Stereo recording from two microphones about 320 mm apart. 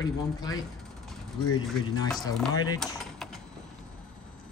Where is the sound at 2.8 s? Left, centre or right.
Centre.